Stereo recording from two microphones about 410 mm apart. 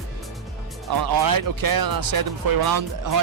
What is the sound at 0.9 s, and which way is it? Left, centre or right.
Speech, right.